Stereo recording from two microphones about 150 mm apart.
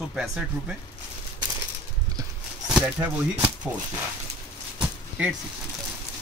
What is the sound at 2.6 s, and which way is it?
Speech, 10° right (ahead or behind).